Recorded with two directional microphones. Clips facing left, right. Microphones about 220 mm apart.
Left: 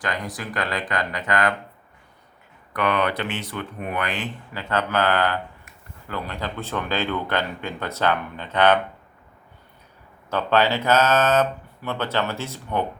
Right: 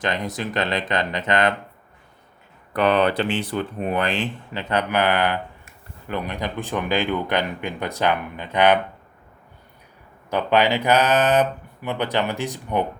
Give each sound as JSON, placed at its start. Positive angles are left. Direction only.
{"t": 0.0, "sound": "speech", "side_deg": -25}
{"t": 2.7, "sound": "speech", "side_deg": -30}
{"t": 4.7, "sound": "speech", "side_deg": -15}
{"t": 10.2, "sound": "speech", "side_deg": -15}